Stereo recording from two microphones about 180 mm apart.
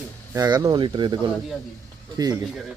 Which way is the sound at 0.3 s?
20° right (ahead or behind).